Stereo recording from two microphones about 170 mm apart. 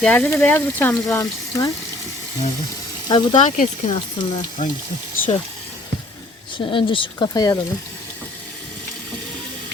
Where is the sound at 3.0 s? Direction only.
25° left (ahead or behind).